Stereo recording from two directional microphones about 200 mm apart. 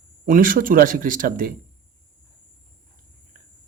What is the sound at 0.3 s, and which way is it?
Speech, 45° right (ahead or behind).